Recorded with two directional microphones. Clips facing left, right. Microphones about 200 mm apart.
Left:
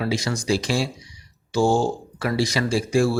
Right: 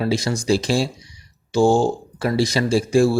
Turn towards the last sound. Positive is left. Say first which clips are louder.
# right 4 dB
turn(degrees=-30)  # may be behind; listen again after turning